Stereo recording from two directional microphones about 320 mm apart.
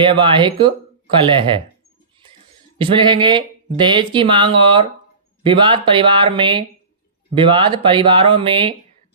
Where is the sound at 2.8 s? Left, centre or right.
Centre.